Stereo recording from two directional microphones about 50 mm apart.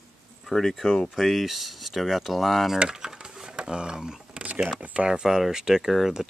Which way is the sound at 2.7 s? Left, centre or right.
Centre.